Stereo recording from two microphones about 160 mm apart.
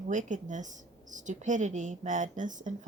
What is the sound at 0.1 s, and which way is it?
Speech, 50° right (ahead or behind).